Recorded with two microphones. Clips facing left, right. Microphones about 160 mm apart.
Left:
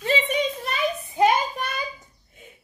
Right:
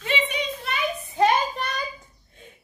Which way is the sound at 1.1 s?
10° left (ahead or behind).